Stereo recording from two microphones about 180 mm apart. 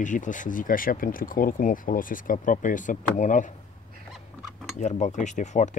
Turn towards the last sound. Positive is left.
turn(degrees=40)  # may be behind; listen again after turning